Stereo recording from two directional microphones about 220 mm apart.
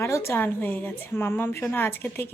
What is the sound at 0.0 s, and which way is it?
A woman's voice, 10° left (ahead or behind).